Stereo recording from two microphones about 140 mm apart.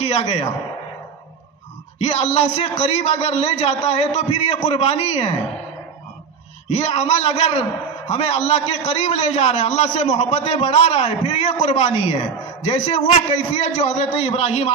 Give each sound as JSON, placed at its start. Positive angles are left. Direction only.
{"t": 0.0, "sound": "a man's voice", "side_deg": 45}
{"t": 2.0, "sound": "a man's voice", "side_deg": 50}
{"t": 6.7, "sound": "a man's voice", "side_deg": 50}